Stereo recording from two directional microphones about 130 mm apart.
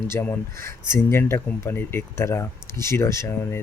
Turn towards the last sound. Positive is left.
turn(degrees=20)  # may be behind; listen again after turning